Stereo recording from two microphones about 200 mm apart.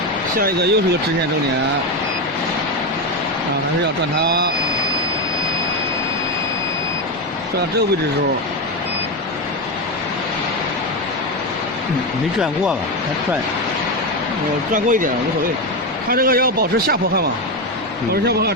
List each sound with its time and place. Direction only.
0.3 s a man's voice: 50° right (ahead or behind)
4.2 s a man's voice: 55° right (ahead or behind)
14.7 s a man's voice: 40° right (ahead or behind)